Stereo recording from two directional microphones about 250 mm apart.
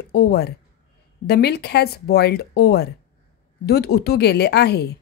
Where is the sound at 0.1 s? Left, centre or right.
Left.